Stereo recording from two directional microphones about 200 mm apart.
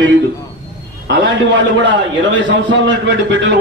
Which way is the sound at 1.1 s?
65° right (ahead or behind).